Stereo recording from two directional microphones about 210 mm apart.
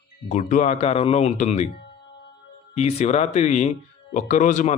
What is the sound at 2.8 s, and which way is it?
Speech, 30° left (ahead or behind).